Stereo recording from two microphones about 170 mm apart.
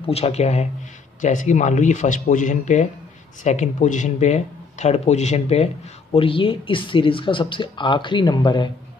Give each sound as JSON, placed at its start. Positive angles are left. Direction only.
{"t": 0.0, "sound": "speech", "side_deg": 35}